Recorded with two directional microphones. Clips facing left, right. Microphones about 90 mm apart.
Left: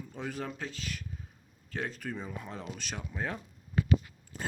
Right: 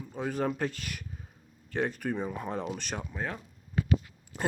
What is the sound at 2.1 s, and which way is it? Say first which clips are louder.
Speech: right 7 dB; 20° right (ahead or behind).